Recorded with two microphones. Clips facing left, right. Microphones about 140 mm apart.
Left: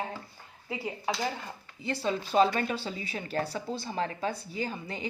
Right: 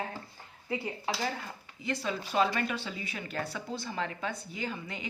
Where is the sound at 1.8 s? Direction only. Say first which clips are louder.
Left 3 dB; 30° left (ahead or behind).